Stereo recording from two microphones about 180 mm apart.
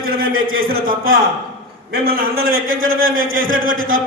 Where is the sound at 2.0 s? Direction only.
55° right (ahead or behind); by 2.9 s 75° right (ahead or behind).